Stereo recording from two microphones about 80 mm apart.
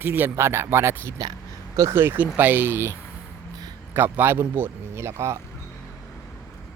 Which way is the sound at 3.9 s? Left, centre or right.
Right.